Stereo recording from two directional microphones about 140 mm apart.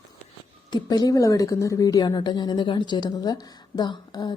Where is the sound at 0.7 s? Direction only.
30° left (ahead or behind).